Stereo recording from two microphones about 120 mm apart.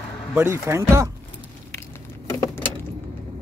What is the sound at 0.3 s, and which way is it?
Speech, 20° right (ahead or behind).